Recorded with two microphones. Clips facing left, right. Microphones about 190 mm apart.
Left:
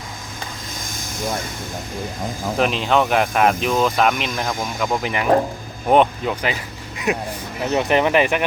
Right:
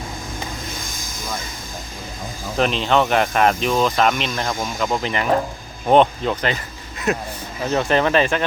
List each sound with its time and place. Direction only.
2.6 s speech: 5° left (ahead or behind)